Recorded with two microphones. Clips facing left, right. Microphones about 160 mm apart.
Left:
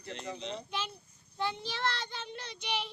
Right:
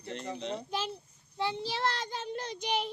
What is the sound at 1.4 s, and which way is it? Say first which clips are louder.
Child singing: right 3 dB; 30° right (ahead or behind).